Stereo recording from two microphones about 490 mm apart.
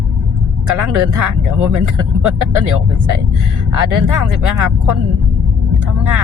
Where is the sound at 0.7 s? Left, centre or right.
Right.